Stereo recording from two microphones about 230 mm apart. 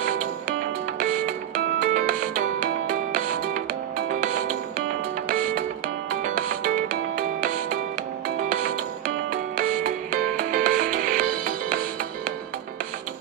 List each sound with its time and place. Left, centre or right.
0.9 s music: right
5.3 s music: right
9.6 s music: right